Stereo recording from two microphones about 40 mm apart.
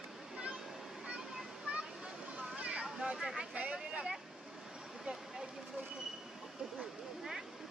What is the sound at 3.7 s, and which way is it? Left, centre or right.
Vehicle, centre.